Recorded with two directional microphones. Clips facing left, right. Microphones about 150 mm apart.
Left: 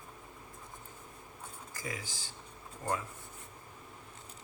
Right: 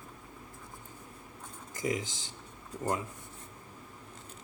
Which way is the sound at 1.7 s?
20° right (ahead or behind).